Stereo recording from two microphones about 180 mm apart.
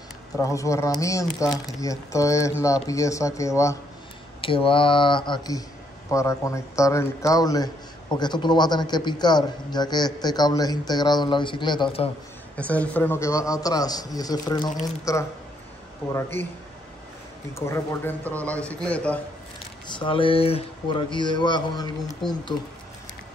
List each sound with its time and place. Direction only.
0.4 s speech: 15° left (ahead or behind)
4.4 s speech: 30° left (ahead or behind)
12.5 s speech: 5° left (ahead or behind)
17.6 s speech: 15° left (ahead or behind)
19.9 s speech: 30° left (ahead or behind)